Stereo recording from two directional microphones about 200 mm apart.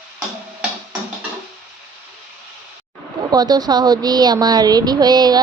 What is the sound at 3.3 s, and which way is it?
Speech, 20° right (ahead or behind).